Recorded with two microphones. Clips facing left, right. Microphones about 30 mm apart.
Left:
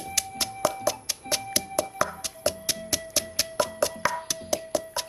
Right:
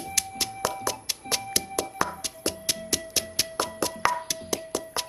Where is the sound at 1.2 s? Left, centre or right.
Centre.